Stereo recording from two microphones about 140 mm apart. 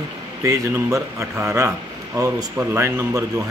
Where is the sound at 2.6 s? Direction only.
15° right (ahead or behind).